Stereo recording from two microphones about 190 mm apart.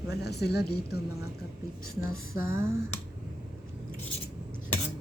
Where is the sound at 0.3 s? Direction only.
60° left (ahead or behind).